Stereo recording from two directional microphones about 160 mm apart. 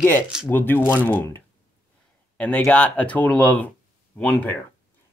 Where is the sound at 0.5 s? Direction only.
10° left (ahead or behind).